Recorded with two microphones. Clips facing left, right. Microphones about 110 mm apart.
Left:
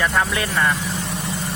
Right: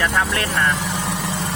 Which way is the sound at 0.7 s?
80° right.